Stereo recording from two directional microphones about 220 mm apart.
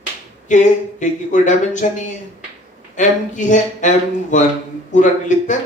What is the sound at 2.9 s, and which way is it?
Speech, 35° left (ahead or behind).